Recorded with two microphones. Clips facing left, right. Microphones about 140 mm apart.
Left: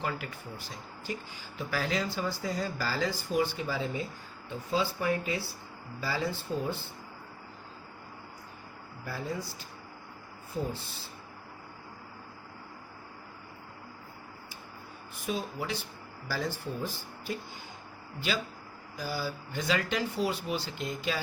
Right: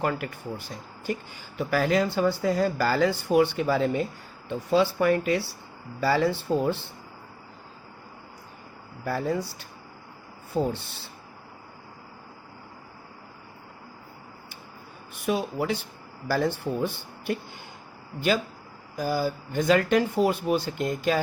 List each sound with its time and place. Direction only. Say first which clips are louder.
0.0 s speech: right 7 dB; 50° right (ahead or behind); by 6.8 s 75° right (ahead or behind)
9.0 s speech: right 9 dB; 70° right (ahead or behind)
15.3 s speech: right 8 dB; 65° right (ahead or behind)
18.9 s speech: right 8 dB; 50° right (ahead or behind)